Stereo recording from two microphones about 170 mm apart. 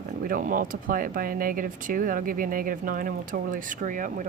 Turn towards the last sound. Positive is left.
turn(degrees=-50)  # may be behind; listen again after turning